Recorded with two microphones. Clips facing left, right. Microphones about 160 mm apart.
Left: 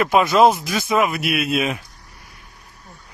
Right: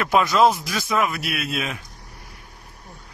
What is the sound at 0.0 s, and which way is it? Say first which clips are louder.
Speech: left 3 dB; 25° left (ahead or behind).